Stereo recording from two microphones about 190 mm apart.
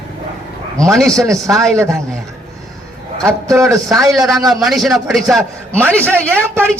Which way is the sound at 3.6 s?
Centre (ahead or behind).